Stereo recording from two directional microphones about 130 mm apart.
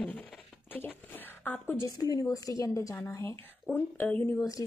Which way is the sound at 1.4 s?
20° left (ahead or behind).